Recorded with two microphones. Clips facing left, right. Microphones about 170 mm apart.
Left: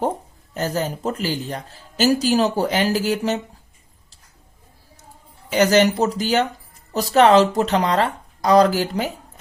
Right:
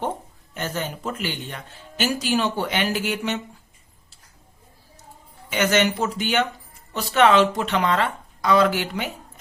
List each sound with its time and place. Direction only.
0.5 s speech: 35° left (ahead or behind)
5.5 s speech: 35° left (ahead or behind)